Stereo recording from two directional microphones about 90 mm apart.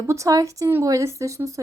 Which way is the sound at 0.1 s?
35° right (ahead or behind).